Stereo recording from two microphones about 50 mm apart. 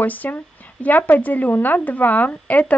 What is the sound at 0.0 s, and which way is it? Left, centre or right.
Speech, left.